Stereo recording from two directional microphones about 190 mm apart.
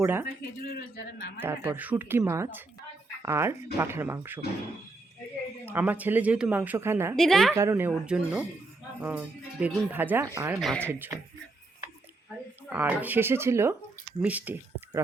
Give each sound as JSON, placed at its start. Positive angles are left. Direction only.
{"t": 0.0, "sound": "speech", "side_deg": -10}
{"t": 0.7, "sound": "a man's voice", "side_deg": 55}
{"t": 1.4, "sound": "speech", "side_deg": -10}
{"t": 5.6, "sound": "speech", "side_deg": -10}
{"t": 7.2, "sound": "a woman's voice", "side_deg": 0}
{"t": 7.5, "sound": "speech", "side_deg": -15}
{"t": 10.6, "sound": "a woman's voice", "side_deg": 0}
{"t": 10.8, "sound": "speech", "side_deg": -10}
{"t": 12.6, "sound": "speech", "side_deg": -10}